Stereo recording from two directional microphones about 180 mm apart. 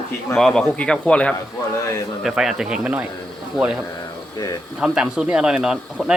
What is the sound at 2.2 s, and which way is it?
Speech, centre (ahead or behind).